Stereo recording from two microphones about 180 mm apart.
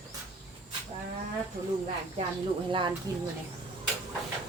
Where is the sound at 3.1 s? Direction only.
20° right (ahead or behind).